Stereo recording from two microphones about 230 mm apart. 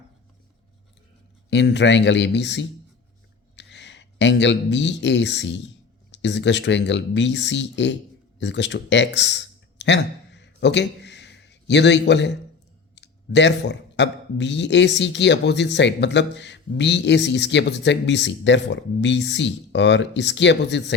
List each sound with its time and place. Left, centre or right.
1.5 s speech: left